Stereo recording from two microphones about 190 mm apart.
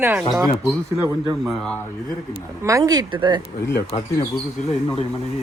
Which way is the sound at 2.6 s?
15° right (ahead or behind).